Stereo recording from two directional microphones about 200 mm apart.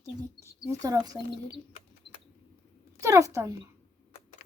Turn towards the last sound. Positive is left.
turn(degrees=-15)  # may be behind; listen again after turning